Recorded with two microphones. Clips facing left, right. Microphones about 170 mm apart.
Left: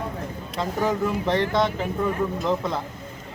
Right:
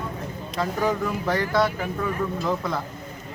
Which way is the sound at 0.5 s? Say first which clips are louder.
Even; 25° left (ahead or behind).